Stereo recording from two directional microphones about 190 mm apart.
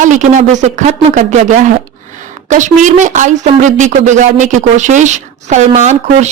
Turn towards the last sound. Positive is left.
turn(degrees=-40)  # may be behind; listen again after turning